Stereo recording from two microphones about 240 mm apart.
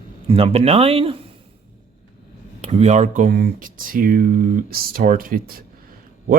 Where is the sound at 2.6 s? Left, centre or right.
Right.